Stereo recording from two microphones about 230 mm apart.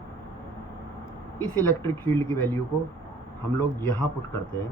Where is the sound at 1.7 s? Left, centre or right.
Centre.